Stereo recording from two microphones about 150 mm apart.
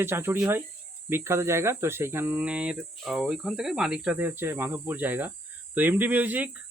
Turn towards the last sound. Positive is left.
turn(degrees=-10)  # may be behind; listen again after turning